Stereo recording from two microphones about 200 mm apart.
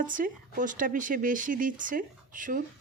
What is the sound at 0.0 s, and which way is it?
Speech, 40° right (ahead or behind).